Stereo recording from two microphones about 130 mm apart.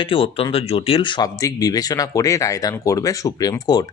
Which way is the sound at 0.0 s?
45° left (ahead or behind).